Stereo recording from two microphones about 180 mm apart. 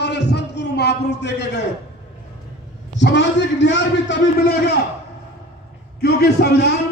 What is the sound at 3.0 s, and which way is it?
A man's voice, 75° left (ahead or behind).